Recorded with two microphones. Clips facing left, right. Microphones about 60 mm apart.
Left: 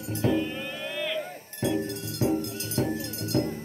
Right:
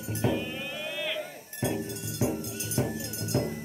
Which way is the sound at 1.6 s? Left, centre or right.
Centre.